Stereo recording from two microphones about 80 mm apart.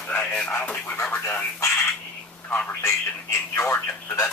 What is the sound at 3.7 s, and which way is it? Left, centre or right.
Speech, left.